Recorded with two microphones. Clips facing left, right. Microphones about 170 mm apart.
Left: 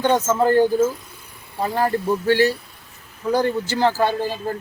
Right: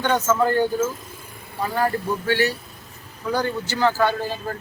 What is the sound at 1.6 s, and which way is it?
Speech, 30° left (ahead or behind).